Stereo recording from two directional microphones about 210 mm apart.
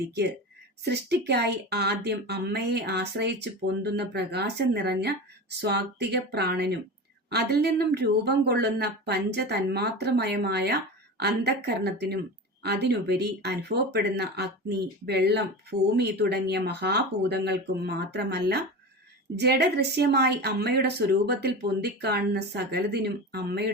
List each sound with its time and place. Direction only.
0.9 s a woman's voice: 50° right (ahead or behind)